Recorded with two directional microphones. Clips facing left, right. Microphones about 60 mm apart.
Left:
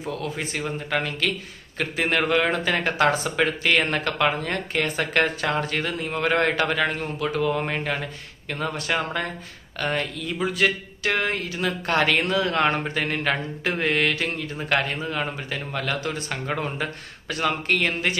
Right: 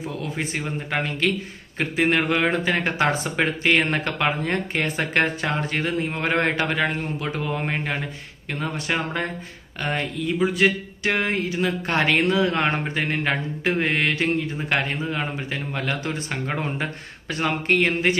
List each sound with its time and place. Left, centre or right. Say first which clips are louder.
0.0 s speech: even; centre
9.8 s a sound: even; centre
13.7 s speech: left 1 dB; right